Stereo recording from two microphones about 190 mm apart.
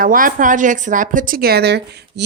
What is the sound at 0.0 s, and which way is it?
Speech, 45° right (ahead or behind).